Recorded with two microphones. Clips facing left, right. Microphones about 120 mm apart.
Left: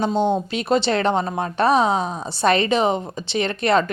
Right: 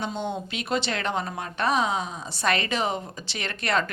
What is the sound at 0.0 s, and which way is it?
A woman's voice, 35° left (ahead or behind).